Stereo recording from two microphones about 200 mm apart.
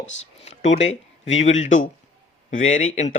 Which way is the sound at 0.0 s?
35° left (ahead or behind).